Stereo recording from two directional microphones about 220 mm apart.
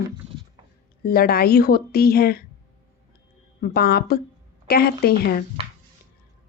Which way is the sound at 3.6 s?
45° left (ahead or behind).